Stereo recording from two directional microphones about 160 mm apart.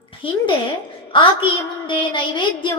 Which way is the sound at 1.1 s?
30° left (ahead or behind).